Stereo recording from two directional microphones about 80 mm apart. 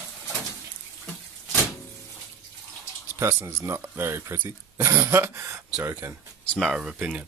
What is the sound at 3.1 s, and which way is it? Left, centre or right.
Speech, right.